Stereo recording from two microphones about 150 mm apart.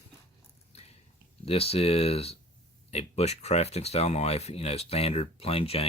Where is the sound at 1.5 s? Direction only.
40° left (ahead or behind).